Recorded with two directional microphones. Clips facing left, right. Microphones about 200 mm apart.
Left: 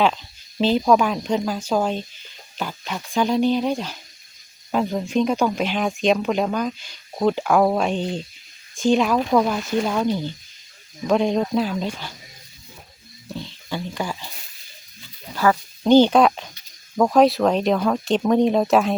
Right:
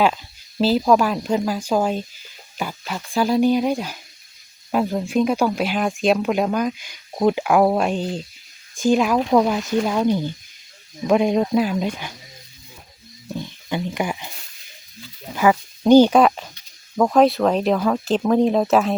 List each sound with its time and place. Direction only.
0.6 s speech: 5° right (ahead or behind)
13.3 s speech: 15° right (ahead or behind)
15.4 s speech: 10° right (ahead or behind)